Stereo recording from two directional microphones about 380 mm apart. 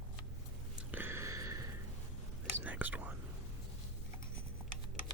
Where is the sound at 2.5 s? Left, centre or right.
Centre.